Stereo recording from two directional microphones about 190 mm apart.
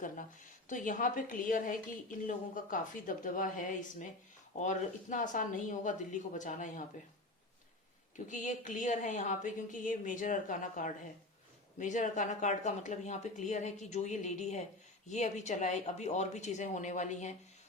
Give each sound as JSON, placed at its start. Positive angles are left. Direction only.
{"t": 0.7, "sound": "a woman's voice", "side_deg": 45}
{"t": 8.1, "sound": "speech", "side_deg": 40}